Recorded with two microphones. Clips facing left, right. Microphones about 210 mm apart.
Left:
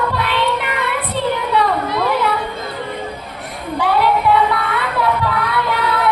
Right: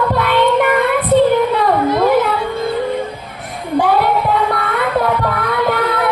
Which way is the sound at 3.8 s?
50° right (ahead or behind).